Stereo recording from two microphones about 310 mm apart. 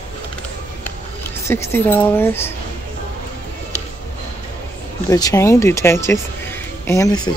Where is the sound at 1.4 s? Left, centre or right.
Centre.